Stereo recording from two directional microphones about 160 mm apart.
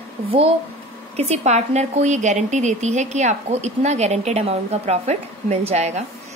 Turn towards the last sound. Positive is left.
turn(degrees=-45)  # may be behind; listen again after turning